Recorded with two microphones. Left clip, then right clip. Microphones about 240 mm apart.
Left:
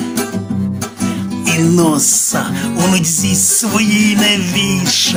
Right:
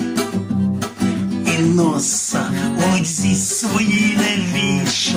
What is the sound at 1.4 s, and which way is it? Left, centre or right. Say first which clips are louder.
Speech: left 4 dB; left.